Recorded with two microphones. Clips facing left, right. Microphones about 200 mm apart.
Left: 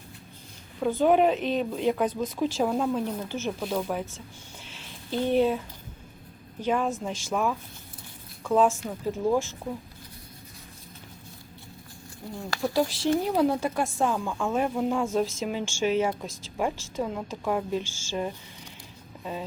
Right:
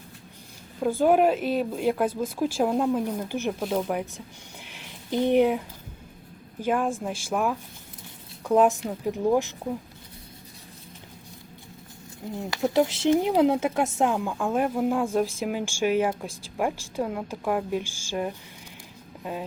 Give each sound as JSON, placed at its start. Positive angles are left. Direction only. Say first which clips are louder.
{"t": 0.8, "sound": "speech", "louder": "right 1 dB", "side_deg": -5}
{"t": 4.6, "sound": "a sound", "louder": "even", "side_deg": -15}
{"t": 6.6, "sound": "speech", "louder": "right 1 dB", "side_deg": -10}
{"t": 12.3, "sound": "speech", "louder": "right 3 dB", "side_deg": -20}